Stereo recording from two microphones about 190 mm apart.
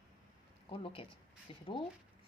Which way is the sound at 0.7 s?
30° left (ahead or behind).